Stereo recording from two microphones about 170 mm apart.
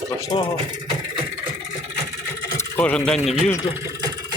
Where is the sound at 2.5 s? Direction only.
10° left (ahead or behind).